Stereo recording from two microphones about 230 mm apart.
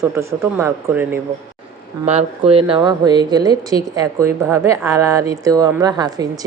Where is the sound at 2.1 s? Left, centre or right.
Right.